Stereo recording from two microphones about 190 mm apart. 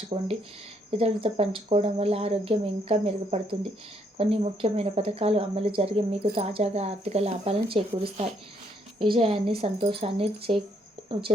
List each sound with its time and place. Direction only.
0.1 s speech: 35° right (ahead or behind)